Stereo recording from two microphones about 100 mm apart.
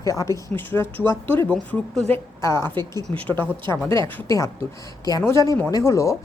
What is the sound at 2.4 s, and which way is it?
Speech, 30° left (ahead or behind).